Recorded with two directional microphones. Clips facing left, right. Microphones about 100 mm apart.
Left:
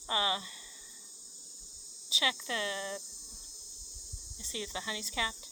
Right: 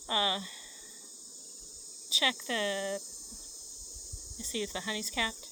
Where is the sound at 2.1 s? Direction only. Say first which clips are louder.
Right 2 dB; 20° left (ahead or behind).